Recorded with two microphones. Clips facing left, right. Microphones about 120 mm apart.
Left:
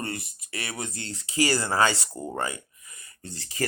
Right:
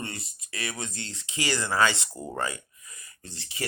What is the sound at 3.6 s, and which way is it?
Speech, 45° left (ahead or behind).